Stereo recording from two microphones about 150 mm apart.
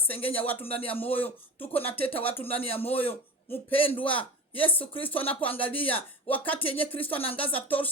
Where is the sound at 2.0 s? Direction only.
40° left (ahead or behind).